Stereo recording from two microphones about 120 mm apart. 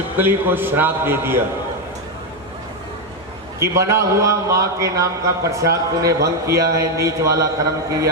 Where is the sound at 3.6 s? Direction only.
25° right (ahead or behind).